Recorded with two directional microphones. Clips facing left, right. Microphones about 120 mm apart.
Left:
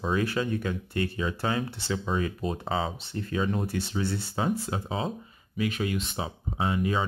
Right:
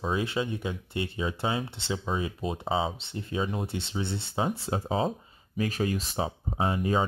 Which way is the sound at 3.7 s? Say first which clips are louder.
Left 3 dB; 25° right (ahead or behind).